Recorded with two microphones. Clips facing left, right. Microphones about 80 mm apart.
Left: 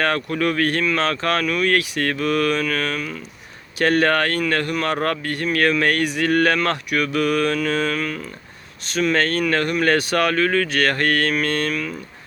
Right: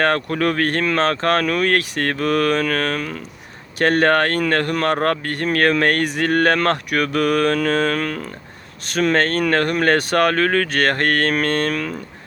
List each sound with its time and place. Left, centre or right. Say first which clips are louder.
0.0 s speech: right 2 dB; right